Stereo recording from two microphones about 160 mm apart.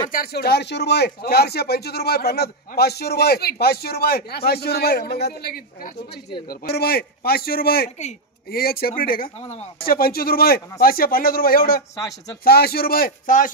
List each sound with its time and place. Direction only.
0.1 s speech: 75° left (ahead or behind)
9.4 s speech: 45° left (ahead or behind)
9.8 s speech: 70° left (ahead or behind)